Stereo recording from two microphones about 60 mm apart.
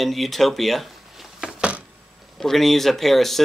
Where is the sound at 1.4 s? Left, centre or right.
Centre.